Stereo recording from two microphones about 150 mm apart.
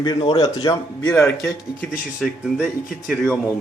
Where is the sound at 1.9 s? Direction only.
5° right (ahead or behind).